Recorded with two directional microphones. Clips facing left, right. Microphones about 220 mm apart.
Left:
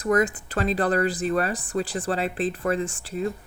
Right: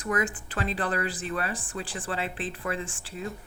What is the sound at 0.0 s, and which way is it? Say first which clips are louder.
Speech: left 7 dB; 40° left (ahead or behind).